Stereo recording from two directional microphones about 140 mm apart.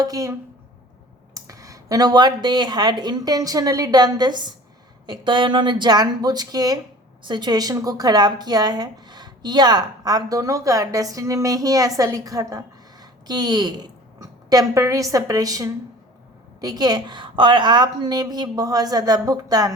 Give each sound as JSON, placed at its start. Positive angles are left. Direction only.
{"t": 0.0, "sound": "speech", "side_deg": -25}